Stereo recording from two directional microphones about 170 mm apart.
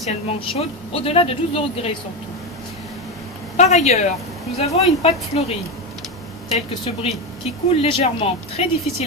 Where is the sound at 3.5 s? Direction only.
40° left (ahead or behind).